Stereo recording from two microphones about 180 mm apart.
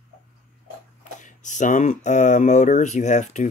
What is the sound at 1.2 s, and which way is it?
Speech, 45° left (ahead or behind).